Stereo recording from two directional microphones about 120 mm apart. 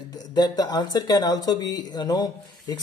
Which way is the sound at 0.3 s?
35° left (ahead or behind).